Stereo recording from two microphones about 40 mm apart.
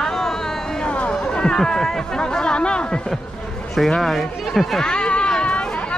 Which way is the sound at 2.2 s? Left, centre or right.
Centre.